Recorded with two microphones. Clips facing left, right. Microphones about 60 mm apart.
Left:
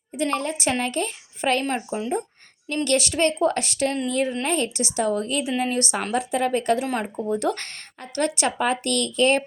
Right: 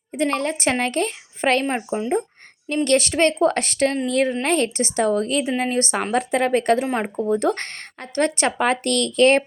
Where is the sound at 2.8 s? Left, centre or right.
Right.